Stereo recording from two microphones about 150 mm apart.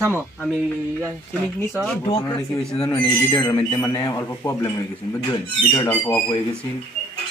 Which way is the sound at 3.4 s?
30° left (ahead or behind).